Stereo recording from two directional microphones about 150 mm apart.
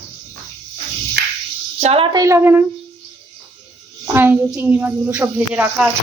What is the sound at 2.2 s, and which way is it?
Speech, 20° right (ahead or behind).